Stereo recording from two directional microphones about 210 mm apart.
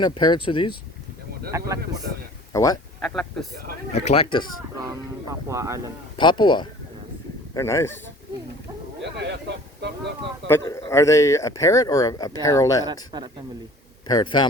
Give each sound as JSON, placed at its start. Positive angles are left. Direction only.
{"t": 0.0, "sound": "speech", "side_deg": 20}
{"t": 1.5, "sound": "speech", "side_deg": -15}
{"t": 2.5, "sound": "speech", "side_deg": 15}
{"t": 3.0, "sound": "speech", "side_deg": 5}
{"t": 3.9, "sound": "speech", "side_deg": 30}
{"t": 5.3, "sound": "speech", "side_deg": -15}
{"t": 6.1, "sound": "speech", "side_deg": 20}
{"t": 9.0, "sound": "a sound", "side_deg": -55}
{"t": 10.5, "sound": "speech", "side_deg": 15}
{"t": 12.9, "sound": "a man's voice", "side_deg": -20}
{"t": 14.1, "sound": "speech", "side_deg": 20}